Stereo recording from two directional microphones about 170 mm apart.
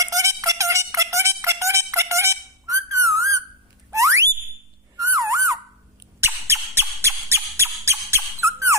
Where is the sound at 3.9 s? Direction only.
15° right (ahead or behind).